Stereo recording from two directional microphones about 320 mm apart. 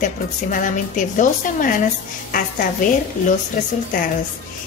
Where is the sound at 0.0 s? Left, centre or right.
Left.